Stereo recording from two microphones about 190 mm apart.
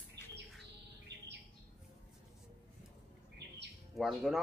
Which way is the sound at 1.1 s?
65° right (ahead or behind).